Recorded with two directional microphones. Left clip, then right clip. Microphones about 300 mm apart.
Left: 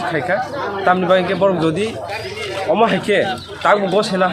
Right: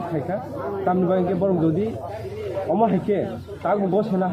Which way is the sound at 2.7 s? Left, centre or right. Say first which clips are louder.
Left 7 dB; left.